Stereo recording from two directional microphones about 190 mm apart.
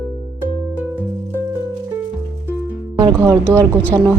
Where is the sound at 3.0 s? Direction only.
20° right (ahead or behind).